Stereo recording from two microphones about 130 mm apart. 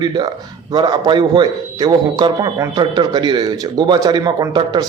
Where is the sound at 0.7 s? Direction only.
35° right (ahead or behind).